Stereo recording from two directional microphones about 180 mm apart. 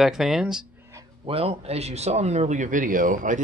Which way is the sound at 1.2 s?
30° right (ahead or behind).